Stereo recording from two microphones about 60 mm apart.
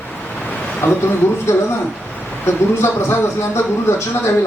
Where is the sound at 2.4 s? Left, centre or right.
Left.